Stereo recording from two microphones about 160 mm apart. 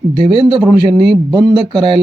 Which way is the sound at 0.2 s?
30° right (ahead or behind).